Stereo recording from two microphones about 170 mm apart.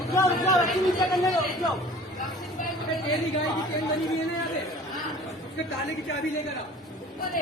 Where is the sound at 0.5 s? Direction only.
Centre (ahead or behind).